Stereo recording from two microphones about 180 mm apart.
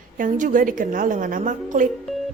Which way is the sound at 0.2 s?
45° right (ahead or behind).